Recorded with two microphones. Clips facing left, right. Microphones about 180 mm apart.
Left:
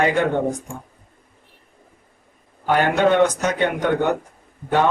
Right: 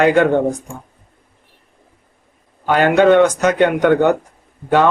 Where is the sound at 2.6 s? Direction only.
90° right.